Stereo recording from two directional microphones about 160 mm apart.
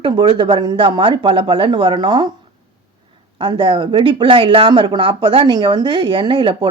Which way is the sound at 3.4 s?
30° right (ahead or behind).